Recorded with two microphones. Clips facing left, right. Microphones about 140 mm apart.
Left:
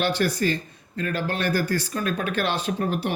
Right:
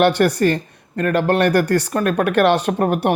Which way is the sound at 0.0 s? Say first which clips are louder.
Right 8 dB; 65° right (ahead or behind).